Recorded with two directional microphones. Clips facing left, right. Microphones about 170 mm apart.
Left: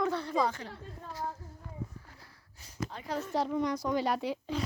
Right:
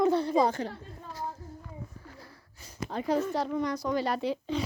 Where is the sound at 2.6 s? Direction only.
45° right (ahead or behind).